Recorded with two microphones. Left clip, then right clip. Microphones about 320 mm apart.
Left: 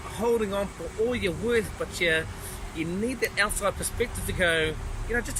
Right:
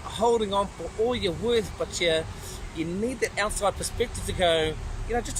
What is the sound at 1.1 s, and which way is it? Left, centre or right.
Speech, centre.